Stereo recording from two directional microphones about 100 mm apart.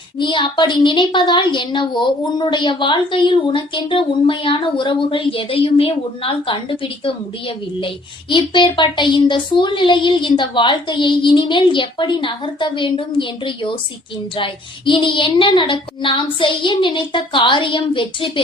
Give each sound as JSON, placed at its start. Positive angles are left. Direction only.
{"t": 0.2, "sound": "a woman's voice", "side_deg": 50}